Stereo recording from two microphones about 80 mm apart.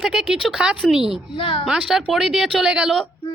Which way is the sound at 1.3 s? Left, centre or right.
Left.